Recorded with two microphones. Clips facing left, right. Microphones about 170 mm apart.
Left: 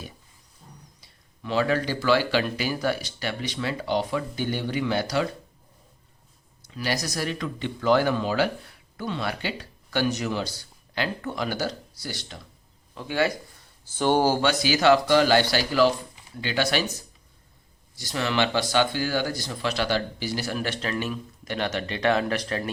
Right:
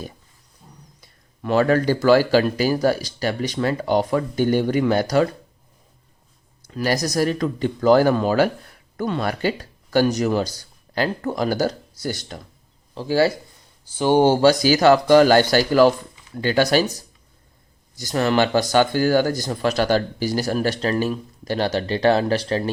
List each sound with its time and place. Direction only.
1.0 s speech: 50° right (ahead or behind)
6.7 s speech: 45° right (ahead or behind)
12.9 s speech: 35° right (ahead or behind)
13.9 s speech: 15° right (ahead or behind)
14.3 s speech: 35° right (ahead or behind)